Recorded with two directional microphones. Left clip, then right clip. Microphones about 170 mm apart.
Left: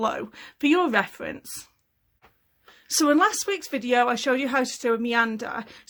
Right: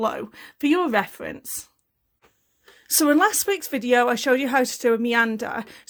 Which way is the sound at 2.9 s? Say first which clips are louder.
Right 1 dB; 35° right (ahead or behind).